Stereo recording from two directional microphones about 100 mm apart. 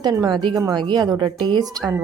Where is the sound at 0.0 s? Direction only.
40° right (ahead or behind).